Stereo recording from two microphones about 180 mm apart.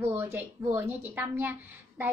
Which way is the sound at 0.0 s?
10° right (ahead or behind).